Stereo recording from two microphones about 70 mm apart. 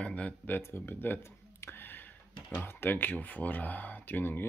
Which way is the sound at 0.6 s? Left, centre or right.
Left.